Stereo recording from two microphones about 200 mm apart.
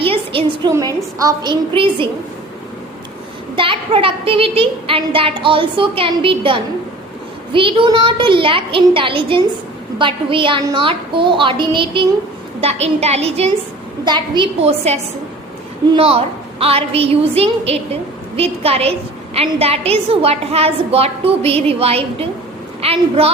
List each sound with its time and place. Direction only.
0.0 s a woman's voice: 25° right (ahead or behind)
3.5 s a woman's voice: 25° right (ahead or behind)